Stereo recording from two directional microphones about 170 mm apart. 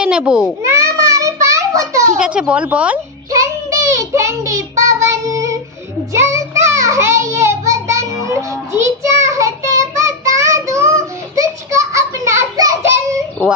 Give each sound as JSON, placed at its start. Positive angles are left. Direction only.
{"t": 0.0, "sound": "a child's voice", "side_deg": -5}
{"t": 0.7, "sound": "a sound", "side_deg": -20}
{"t": 2.1, "sound": "a woman's voice", "side_deg": -5}
{"t": 3.3, "sound": "child singing", "side_deg": -20}